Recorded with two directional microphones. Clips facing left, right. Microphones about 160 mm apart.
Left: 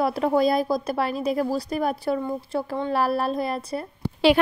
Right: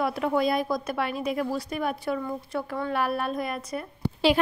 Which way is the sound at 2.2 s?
25° left (ahead or behind).